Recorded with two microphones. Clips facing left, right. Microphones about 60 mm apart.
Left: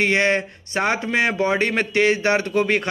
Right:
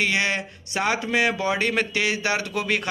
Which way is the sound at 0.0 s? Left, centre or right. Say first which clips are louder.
Left 5 dB; left.